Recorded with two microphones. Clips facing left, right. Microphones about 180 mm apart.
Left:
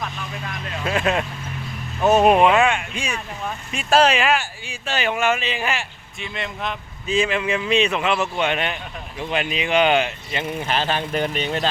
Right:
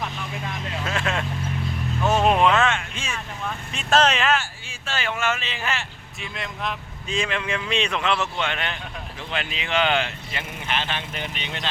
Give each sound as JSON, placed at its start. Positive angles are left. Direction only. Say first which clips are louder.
{"t": 0.9, "sound": "speech", "louder": "left 6 dB", "side_deg": 15}
{"t": 2.0, "sound": "a sound", "louder": "left 5 dB", "side_deg": 15}
{"t": 3.7, "sound": "speech", "louder": "left 3 dB", "side_deg": 10}
{"t": 6.1, "sound": "speech", "louder": "left 3 dB", "side_deg": 0}
{"t": 10.6, "sound": "speech", "louder": "left 4 dB", "side_deg": 40}